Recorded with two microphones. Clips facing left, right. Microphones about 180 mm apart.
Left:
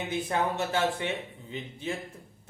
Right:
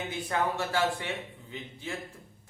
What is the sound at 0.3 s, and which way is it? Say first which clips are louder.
Speech: right 1 dB; 20° left (ahead or behind).